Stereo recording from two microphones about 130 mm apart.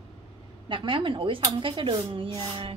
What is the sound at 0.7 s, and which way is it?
Speech, 40° right (ahead or behind).